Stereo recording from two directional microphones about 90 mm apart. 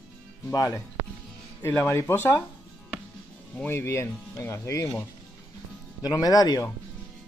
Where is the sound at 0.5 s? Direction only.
40° left (ahead or behind).